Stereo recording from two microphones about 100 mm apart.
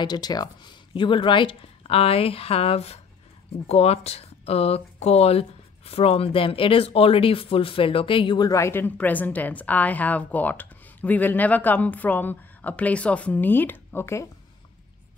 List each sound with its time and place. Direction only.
0.0 s speech: 45° left (ahead or behind)
0.9 s speech: 55° left (ahead or behind)
8.4 s a woman's voice: 30° left (ahead or behind)